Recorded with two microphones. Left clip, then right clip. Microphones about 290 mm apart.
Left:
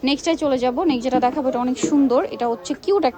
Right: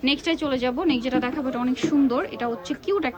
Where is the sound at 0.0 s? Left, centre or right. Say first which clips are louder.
Left 4 dB; centre.